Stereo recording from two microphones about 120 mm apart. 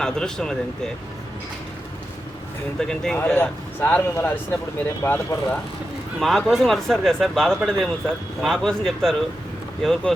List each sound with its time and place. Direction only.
0.0 s speech: 5° left (ahead or behind)
2.7 s speech: 5° left (ahead or behind)
6.1 s speech: centre (ahead or behind)